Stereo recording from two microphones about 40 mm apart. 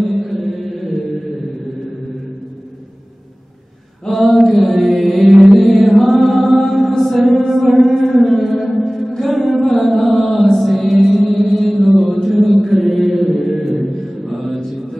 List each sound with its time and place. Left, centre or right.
0.0 s chant: centre
4.0 s mantra: centre
6.6 s chant: centre
7.0 s mantra: centre
7.8 s music: centre
9.6 s music: centre
9.8 s mantra: centre
13.6 s music: centre
14.0 s mantra: centre